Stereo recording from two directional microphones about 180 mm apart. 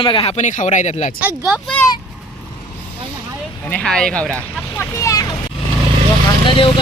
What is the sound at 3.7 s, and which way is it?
Speech, 5° left (ahead or behind).